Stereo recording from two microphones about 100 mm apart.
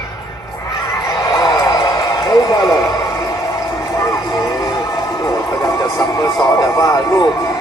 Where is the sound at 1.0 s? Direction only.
35° left (ahead or behind).